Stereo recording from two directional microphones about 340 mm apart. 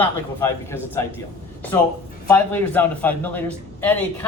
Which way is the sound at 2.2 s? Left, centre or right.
Centre.